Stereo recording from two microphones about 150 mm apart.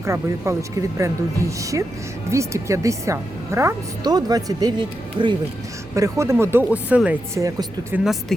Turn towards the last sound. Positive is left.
turn(degrees=-20)  # may be behind; listen again after turning